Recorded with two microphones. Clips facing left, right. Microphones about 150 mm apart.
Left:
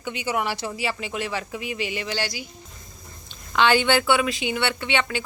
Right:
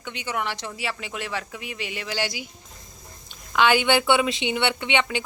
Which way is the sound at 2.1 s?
15° right (ahead or behind).